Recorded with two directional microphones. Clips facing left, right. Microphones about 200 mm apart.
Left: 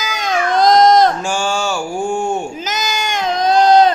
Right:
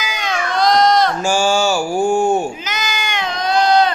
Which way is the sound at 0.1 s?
45° left (ahead or behind).